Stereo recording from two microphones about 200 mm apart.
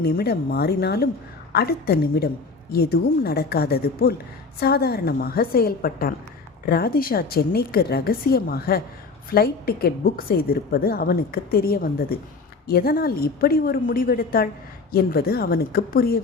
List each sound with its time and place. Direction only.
0.0 s a woman's voice: 50° left (ahead or behind)